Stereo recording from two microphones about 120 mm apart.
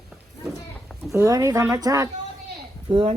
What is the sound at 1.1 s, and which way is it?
Speech, 25° right (ahead or behind).